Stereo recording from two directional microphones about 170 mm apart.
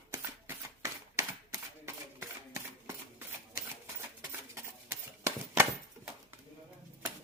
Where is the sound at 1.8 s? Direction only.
15° right (ahead or behind).